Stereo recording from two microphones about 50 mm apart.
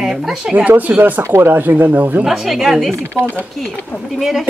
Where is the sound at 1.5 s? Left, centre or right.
Right.